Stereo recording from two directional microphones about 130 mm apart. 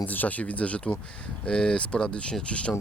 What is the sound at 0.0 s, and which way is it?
Speech, 15° left (ahead or behind).